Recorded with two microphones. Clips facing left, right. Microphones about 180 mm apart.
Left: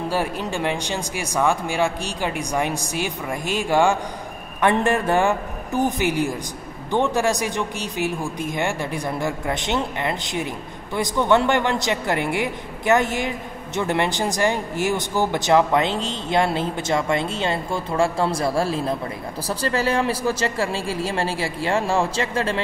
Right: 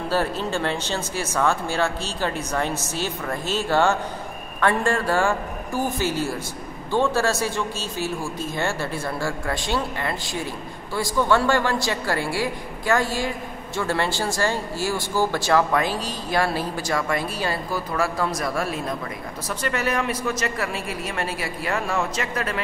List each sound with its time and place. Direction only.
0.1 s speech: 15° left (ahead or behind)